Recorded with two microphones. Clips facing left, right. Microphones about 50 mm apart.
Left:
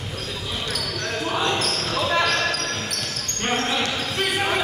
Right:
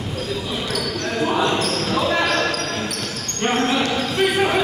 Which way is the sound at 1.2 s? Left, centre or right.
Centre.